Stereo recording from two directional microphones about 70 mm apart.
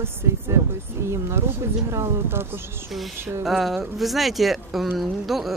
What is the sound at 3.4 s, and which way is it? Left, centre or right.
Speech, centre.